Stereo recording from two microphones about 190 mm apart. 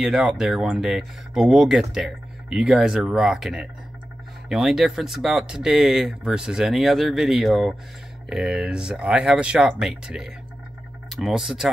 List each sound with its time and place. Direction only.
0.0 s speech: centre (ahead or behind)